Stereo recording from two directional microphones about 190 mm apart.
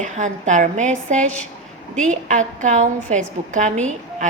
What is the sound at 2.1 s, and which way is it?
A woman's voice, 40° right (ahead or behind).